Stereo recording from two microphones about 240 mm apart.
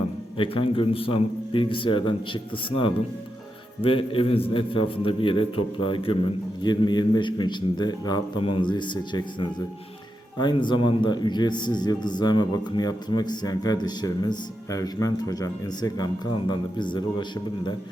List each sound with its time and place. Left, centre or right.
0.3 s a man's voice: left